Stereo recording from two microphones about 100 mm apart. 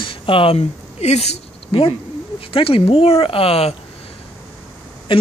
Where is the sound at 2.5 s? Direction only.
65° left (ahead or behind).